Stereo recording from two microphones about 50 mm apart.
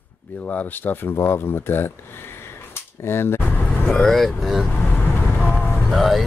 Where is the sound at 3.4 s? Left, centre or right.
Left.